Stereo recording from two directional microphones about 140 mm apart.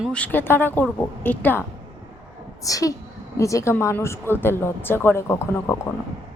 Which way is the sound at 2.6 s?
25° left (ahead or behind).